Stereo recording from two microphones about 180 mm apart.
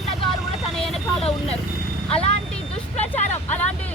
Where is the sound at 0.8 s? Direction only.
Centre (ahead or behind).